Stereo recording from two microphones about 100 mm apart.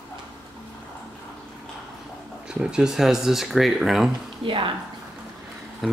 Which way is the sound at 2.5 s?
10° right (ahead or behind).